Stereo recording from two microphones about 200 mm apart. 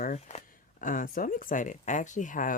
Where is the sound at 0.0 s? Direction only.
35° left (ahead or behind).